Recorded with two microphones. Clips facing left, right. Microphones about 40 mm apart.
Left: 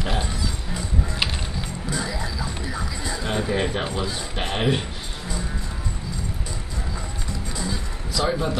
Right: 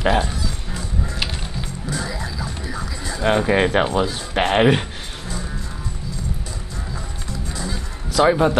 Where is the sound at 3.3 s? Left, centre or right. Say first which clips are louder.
Right 7 dB; right.